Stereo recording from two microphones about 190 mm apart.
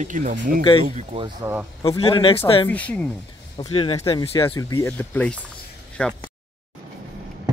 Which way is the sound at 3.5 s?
30° left (ahead or behind).